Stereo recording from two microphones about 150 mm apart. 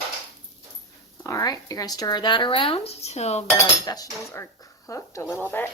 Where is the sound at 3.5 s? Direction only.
25° left (ahead or behind).